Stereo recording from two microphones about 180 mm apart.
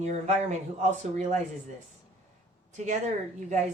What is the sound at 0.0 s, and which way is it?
Speech, 40° right (ahead or behind).